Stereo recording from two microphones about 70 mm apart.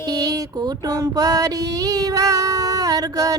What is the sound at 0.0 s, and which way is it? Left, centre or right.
Female singing, right.